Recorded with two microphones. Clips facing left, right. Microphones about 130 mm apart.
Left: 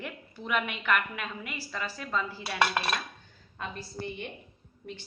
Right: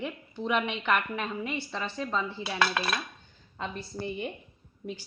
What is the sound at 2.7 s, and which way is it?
Dishes, centre (ahead or behind).